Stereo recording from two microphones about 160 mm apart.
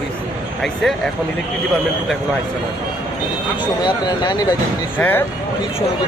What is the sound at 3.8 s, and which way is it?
Speech, 25° left (ahead or behind).